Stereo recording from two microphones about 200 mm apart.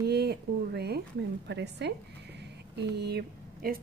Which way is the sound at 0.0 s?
55° right (ahead or behind).